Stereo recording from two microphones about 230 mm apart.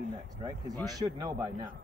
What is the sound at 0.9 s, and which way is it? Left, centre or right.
Speech, centre.